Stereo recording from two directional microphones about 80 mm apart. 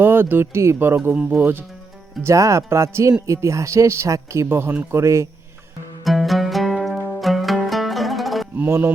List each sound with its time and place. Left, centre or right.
0.0 s speech: right
2.2 s speech: right
4.9 s speech: right
6.1 s music: centre
8.5 s speech: right